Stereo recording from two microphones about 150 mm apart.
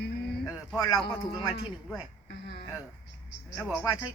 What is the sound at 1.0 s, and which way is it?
Speech, 30° left (ahead or behind).